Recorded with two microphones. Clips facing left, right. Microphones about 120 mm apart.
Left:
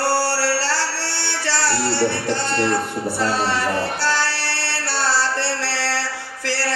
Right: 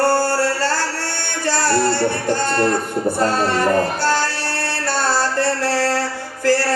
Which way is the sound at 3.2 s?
45° right (ahead or behind).